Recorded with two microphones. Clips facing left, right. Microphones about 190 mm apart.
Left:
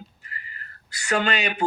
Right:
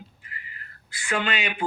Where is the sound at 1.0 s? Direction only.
40° left (ahead or behind).